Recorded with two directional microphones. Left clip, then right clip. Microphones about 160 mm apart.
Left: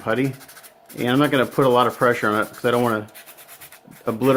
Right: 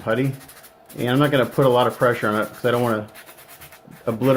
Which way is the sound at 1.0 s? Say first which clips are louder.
Even; 55° left (ahead or behind).